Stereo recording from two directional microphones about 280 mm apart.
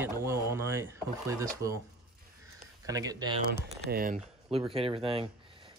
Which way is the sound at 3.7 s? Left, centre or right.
Right.